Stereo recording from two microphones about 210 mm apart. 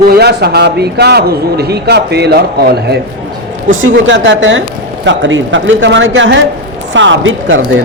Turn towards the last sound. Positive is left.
turn(degrees=-65)  # may be behind; listen again after turning